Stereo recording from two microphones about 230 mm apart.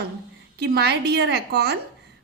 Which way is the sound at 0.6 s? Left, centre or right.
Right.